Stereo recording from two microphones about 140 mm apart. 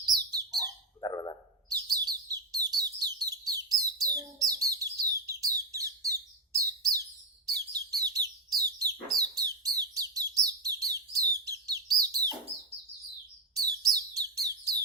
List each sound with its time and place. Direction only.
0.3 s bird: 30° right (ahead or behind)
1.0 s a sound: 25° left (ahead or behind)
1.7 s bird: 25° right (ahead or behind)
6.6 s chirp: 25° right (ahead or behind)
13.5 s bird: 25° right (ahead or behind)